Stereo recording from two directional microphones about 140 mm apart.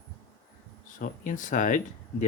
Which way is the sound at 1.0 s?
75° left (ahead or behind).